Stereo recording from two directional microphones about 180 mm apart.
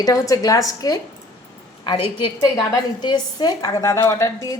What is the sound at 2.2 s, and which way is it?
A woman's voice, 25° left (ahead or behind).